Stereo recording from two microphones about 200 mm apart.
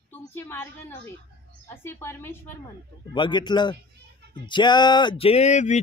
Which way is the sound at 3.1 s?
20° left (ahead or behind).